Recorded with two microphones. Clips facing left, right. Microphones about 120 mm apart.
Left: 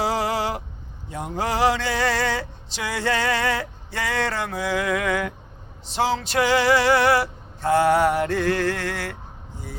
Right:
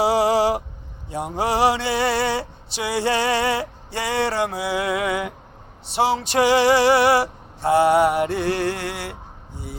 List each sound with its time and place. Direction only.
0.0 s a sound: 15° right (ahead or behind)
1.4 s male singing: 15° right (ahead or behind)
4.8 s music: 25° right (ahead or behind)
5.0 s male singing: 15° right (ahead or behind)
8.1 s music: 20° right (ahead or behind)